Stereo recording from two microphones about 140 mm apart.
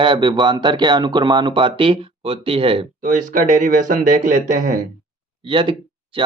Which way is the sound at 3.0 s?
65° right (ahead or behind).